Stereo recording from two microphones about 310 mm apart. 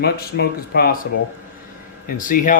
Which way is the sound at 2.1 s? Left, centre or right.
Left.